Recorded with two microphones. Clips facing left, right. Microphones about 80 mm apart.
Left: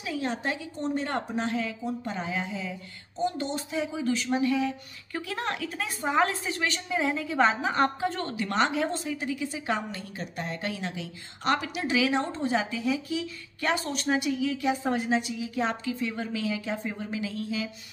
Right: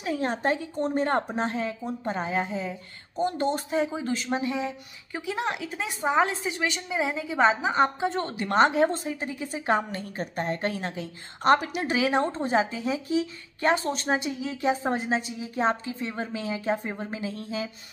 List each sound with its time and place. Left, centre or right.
0.0 s a woman's voice: right